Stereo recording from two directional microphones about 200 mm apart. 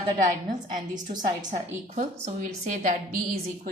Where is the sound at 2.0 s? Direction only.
40° right (ahead or behind).